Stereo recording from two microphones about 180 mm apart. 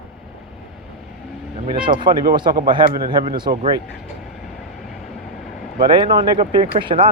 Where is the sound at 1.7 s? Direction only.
25° right (ahead or behind).